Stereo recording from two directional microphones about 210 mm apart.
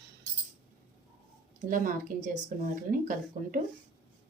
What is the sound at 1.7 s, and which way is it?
Speech, 40° right (ahead or behind).